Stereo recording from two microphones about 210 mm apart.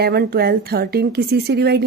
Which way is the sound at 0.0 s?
50° right (ahead or behind).